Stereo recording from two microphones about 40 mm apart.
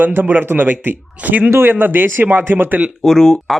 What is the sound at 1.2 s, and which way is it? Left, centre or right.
Speech, right.